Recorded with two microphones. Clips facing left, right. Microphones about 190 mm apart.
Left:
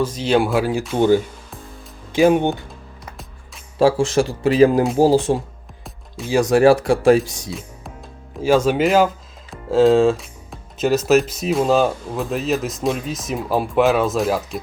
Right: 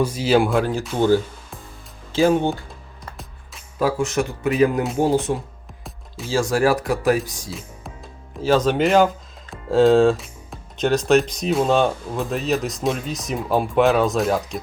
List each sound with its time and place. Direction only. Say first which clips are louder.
0.0 s speech: even; 10° right (ahead or behind); by 2.5 s 15° left (ahead or behind)
3.8 s a man's voice: left 5 dB; 30° left (ahead or behind)
6.2 s a man's voice: left 5 dB; 20° left (ahead or behind)
8.4 s speech: left 2 dB; 10° left (ahead or behind)